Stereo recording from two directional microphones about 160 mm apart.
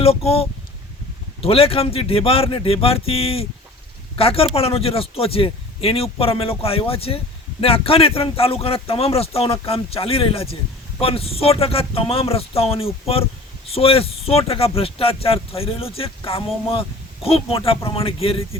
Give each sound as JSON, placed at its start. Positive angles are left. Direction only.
{"t": 0.0, "sound": "speech", "side_deg": 40}